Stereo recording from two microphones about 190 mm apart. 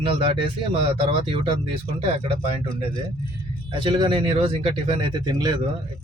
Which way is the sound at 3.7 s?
25° right (ahead or behind).